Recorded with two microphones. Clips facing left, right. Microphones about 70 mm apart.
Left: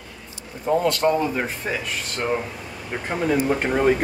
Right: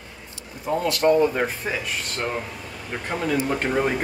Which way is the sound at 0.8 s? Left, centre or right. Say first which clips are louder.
Right 3 dB; centre.